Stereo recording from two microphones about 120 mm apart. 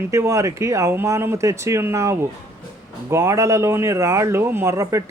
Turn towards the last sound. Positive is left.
turn(degrees=-25)  # may be behind; listen again after turning